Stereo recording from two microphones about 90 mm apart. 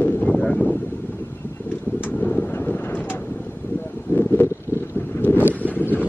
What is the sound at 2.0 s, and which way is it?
Vehicle, 20° left (ahead or behind).